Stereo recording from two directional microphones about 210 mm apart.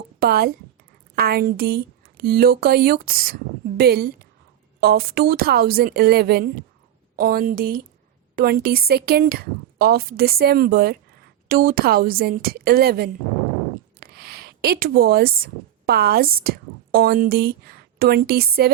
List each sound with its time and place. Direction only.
0.2 s speech: 45° right (ahead or behind)
14.0 s a sound: 45° right (ahead or behind)
15.9 s speech: 45° right (ahead or behind)